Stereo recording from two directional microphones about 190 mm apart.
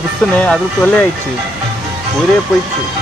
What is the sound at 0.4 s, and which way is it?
Speech, 5° left (ahead or behind).